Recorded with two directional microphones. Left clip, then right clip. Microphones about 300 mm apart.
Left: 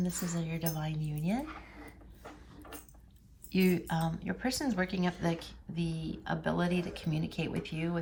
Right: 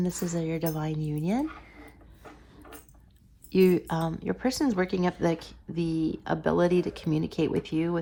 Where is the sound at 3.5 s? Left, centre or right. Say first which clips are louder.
Right 8 dB; centre.